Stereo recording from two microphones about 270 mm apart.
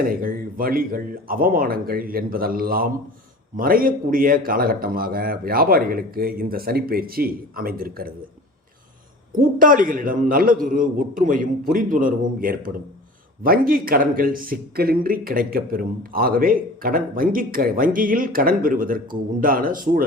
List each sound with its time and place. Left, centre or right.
0.1 s speech: right
9.3 s speech: right